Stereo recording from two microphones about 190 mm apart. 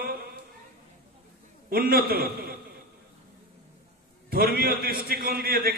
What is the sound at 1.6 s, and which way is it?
Speech, 50° right (ahead or behind).